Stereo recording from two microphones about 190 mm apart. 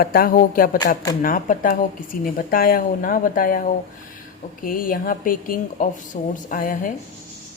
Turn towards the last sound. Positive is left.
turn(degrees=45)  # may be behind; listen again after turning